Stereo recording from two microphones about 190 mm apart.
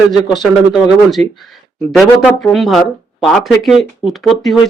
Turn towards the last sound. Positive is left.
turn(degrees=0)  # may be behind; listen again after turning